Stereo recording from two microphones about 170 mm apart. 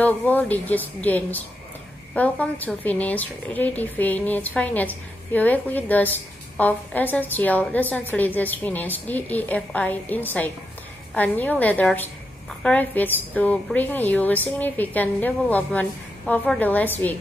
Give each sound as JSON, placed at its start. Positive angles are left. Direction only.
{"t": 0.0, "sound": "a woman's voice", "side_deg": 10}